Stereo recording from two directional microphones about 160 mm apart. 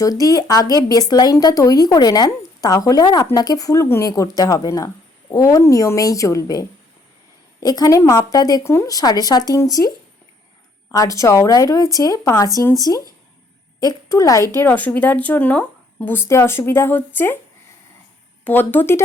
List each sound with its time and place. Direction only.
0.0 s a woman's voice: 20° left (ahead or behind)
10.9 s a woman's voice: 20° left (ahead or behind)
18.4 s speech: 10° left (ahead or behind)